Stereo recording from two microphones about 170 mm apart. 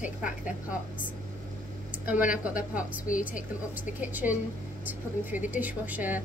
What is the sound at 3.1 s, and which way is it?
Speech, 50° left (ahead or behind).